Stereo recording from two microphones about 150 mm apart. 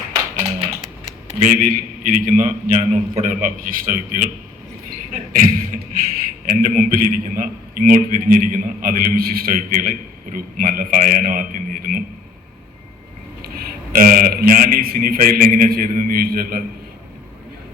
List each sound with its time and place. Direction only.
1.3 s a man's voice: 60° right (ahead or behind)
5.3 s a man's voice: 70° right (ahead or behind)
13.4 s a man's voice: 75° right (ahead or behind)